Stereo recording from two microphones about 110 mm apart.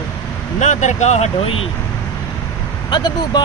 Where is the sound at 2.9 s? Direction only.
40° left (ahead or behind).